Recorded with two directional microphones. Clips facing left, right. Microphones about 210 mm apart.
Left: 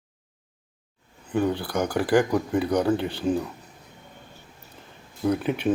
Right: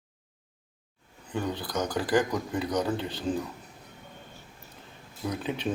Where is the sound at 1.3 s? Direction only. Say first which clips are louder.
Left 7 dB; 10° left (ahead or behind).